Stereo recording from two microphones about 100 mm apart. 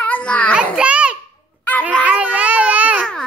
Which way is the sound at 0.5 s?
10° right (ahead or behind).